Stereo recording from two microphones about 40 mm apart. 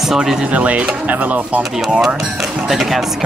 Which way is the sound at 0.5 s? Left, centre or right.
Right.